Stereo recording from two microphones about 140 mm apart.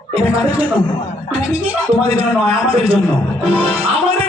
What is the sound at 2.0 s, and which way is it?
A man's voice, 45° right (ahead or behind).